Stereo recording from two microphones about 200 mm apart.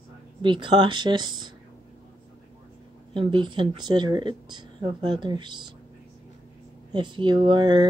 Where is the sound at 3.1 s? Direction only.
25° right (ahead or behind).